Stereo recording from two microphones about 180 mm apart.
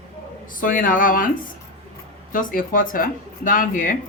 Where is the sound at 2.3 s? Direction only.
50° left (ahead or behind).